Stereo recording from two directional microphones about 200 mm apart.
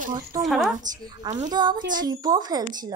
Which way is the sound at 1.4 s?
20° right (ahead or behind).